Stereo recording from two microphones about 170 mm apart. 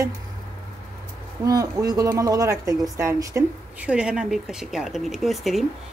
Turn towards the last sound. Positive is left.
turn(degrees=0)  # may be behind; listen again after turning